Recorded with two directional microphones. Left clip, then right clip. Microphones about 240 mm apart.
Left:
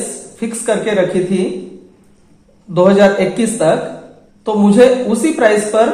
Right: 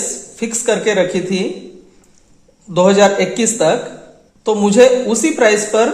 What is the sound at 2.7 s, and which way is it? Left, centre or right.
A woman's voice, right.